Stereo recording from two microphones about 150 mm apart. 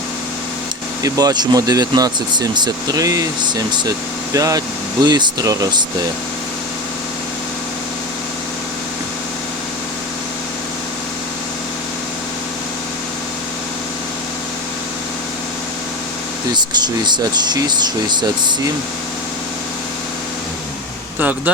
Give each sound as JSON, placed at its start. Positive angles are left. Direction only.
{"t": 1.0, "sound": "speech", "side_deg": -25}
{"t": 4.4, "sound": "speech", "side_deg": -25}
{"t": 16.7, "sound": "speech", "side_deg": -30}
{"t": 21.2, "sound": "speech", "side_deg": -10}